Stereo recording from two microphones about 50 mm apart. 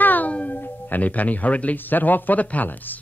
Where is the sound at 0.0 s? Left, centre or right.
Left.